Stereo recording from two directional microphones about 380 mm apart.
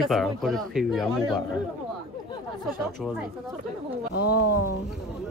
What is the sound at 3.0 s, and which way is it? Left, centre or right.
Speech, centre.